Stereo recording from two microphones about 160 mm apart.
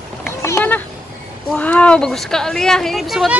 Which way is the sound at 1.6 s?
10° left (ahead or behind).